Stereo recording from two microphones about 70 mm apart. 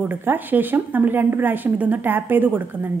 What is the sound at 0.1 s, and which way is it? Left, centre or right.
A woman's voice, right.